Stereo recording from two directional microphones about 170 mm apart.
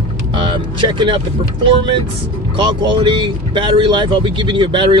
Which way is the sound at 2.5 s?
25° right (ahead or behind).